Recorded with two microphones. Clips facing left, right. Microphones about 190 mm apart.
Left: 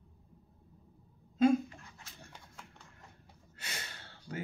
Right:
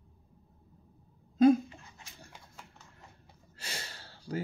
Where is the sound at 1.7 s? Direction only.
20° right (ahead or behind).